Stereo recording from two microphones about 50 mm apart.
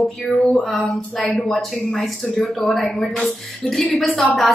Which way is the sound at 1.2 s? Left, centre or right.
Left.